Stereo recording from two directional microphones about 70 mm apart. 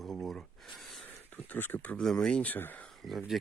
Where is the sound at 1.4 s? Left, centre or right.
Left.